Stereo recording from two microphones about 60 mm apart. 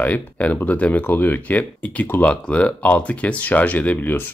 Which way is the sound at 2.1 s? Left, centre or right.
Left.